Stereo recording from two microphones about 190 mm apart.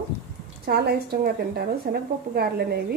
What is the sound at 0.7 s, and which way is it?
A woman's voice, 55° right (ahead or behind).